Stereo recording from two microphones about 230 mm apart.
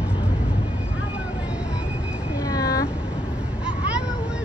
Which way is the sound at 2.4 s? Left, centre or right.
Centre.